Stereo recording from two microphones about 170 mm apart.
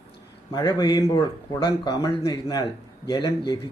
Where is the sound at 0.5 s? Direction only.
25° left (ahead or behind).